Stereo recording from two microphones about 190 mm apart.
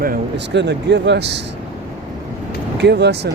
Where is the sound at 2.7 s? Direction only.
65° right (ahead or behind).